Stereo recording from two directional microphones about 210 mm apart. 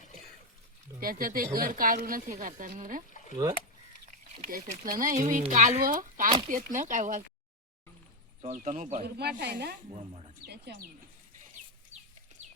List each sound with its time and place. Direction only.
0.9 s a woman's voice: 45° right (ahead or behind)
3.1 s a sound: 40° left (ahead or behind)
4.5 s a woman's voice: 40° right (ahead or behind)
8.4 s a woman's voice: 35° right (ahead or behind); by 9.7 s 50° right (ahead or behind)
9.9 s speech: 30° right (ahead or behind)
10.4 s speech: 50° right (ahead or behind)
11.9 s chicken: 30° right (ahead or behind)